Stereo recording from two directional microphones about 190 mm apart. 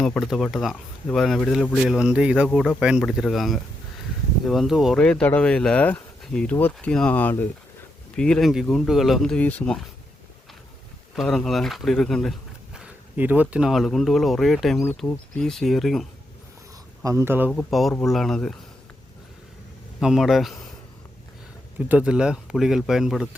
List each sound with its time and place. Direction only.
0.0 s speech: centre (ahead or behind)
11.1 s speech: centre (ahead or behind)
17.0 s speech: 15° right (ahead or behind)
17.5 s speech: 5° left (ahead or behind)
20.0 s speech: centre (ahead or behind)
21.8 s speech: 5° right (ahead or behind)